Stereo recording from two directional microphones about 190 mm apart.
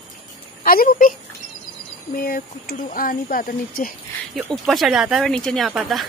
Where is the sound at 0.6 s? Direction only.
50° left (ahead or behind).